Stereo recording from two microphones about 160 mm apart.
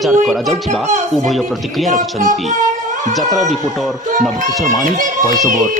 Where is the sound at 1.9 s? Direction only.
55° right (ahead or behind).